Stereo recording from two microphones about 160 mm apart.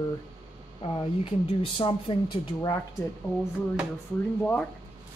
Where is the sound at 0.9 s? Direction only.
35° left (ahead or behind).